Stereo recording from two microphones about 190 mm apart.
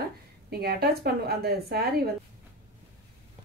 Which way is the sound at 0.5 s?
55° right (ahead or behind).